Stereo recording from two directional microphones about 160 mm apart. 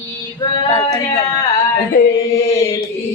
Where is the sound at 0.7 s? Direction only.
20° left (ahead or behind).